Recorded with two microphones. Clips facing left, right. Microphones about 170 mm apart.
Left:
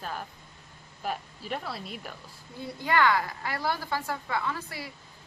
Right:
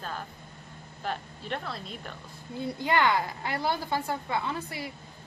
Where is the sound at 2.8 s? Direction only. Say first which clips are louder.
Left 1 dB; 20° right (ahead or behind).